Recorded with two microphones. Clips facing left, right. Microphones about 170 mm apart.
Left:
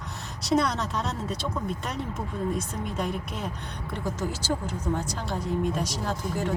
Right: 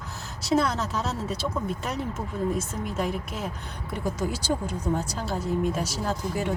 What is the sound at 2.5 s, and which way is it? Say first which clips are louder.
Speech: right 1 dB; 5° right (ahead or behind).